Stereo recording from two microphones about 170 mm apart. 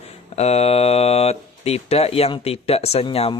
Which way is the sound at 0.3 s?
40° left (ahead or behind).